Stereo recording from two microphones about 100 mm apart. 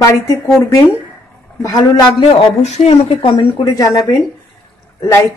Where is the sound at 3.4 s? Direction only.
50° left (ahead or behind).